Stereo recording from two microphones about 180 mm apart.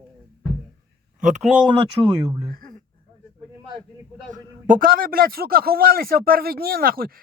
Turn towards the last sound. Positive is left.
turn(degrees=-55)  # may be behind; listen again after turning